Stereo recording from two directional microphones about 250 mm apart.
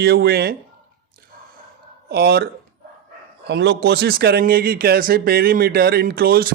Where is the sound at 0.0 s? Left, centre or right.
Right.